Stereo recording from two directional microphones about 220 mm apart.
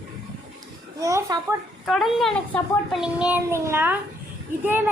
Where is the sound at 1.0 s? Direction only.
15° right (ahead or behind).